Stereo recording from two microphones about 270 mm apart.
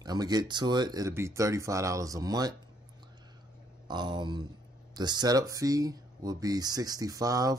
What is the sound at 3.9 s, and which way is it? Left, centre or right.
Speech, centre.